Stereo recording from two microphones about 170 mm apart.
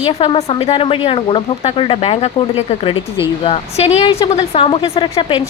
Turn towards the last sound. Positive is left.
turn(degrees=30)  # may be behind; listen again after turning